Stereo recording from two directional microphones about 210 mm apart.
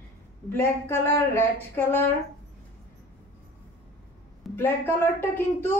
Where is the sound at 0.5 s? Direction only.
10° left (ahead or behind).